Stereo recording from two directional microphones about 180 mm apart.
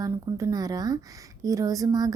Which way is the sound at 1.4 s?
20° right (ahead or behind).